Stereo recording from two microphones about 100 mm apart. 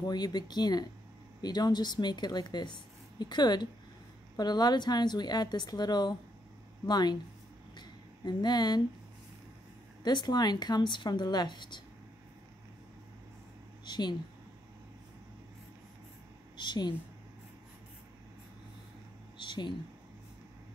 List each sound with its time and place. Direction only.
0.0 s a woman's voice: 45° left (ahead or behind)
7.7 s a sound: 45° left (ahead or behind)
10.0 s a woman's voice: 45° left (ahead or behind)
13.8 s speech: 45° left (ahead or behind)
16.5 s a woman's voice: 45° left (ahead or behind)
19.3 s a sound: 50° left (ahead or behind)